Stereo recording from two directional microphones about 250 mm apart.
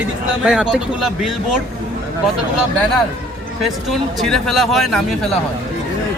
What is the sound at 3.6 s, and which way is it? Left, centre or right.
A man's voice, centre.